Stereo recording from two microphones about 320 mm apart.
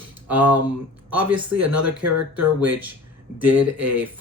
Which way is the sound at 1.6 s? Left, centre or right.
Right.